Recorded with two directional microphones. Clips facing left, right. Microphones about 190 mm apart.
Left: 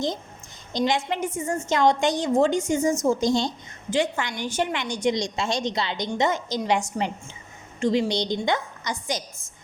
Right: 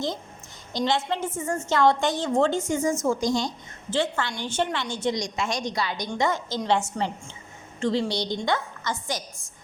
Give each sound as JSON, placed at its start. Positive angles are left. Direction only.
{"t": 0.7, "sound": "a woman's voice", "side_deg": 15}
{"t": 3.8, "sound": "a woman's voice", "side_deg": 10}